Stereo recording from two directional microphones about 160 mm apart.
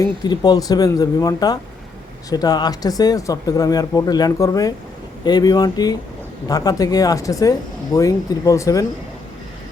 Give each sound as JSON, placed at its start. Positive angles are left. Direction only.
{"t": 0.0, "sound": "speech", "side_deg": 25}